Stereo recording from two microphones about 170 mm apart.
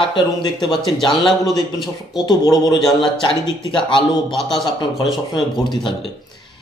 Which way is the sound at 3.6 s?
30° left (ahead or behind).